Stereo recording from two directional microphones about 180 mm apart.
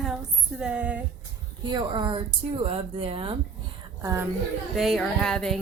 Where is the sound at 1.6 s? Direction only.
25° right (ahead or behind).